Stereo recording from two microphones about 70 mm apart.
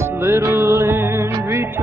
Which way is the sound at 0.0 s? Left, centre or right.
Right.